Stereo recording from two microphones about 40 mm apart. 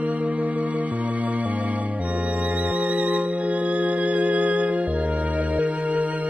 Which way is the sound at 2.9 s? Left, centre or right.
Right.